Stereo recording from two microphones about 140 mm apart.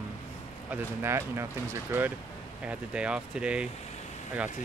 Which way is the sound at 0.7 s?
20° right (ahead or behind).